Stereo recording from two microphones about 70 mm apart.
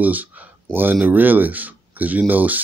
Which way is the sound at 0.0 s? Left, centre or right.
Right.